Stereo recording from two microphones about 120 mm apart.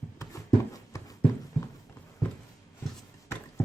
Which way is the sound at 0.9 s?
25° left (ahead or behind).